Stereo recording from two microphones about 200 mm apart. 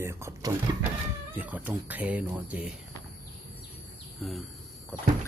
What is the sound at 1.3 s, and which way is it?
Speech, 10° right (ahead or behind).